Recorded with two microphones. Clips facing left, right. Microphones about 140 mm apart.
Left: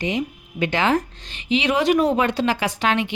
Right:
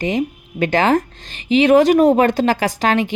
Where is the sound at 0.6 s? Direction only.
45° right (ahead or behind).